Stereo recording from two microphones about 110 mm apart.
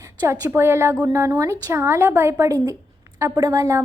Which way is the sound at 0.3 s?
25° right (ahead or behind).